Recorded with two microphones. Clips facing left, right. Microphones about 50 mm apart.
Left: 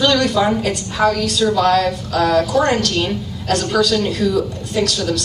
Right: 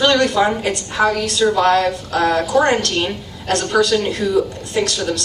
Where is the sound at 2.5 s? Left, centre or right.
Centre.